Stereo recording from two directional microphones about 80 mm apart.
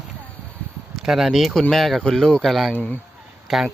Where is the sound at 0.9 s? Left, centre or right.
Centre.